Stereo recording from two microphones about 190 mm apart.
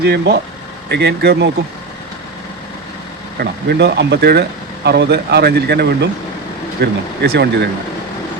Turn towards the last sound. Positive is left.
turn(degrees=-60)  # may be behind; listen again after turning